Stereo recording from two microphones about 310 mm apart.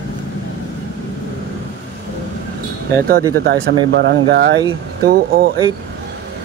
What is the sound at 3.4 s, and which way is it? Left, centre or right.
Speech, right.